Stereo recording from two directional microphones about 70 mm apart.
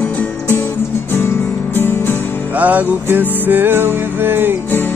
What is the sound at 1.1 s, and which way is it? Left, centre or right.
Music, left.